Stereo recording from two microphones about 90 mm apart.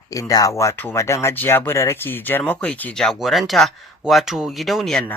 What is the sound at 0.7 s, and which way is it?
Speech, 30° left (ahead or behind).